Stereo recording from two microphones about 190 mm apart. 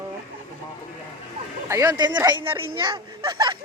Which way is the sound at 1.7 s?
20° right (ahead or behind).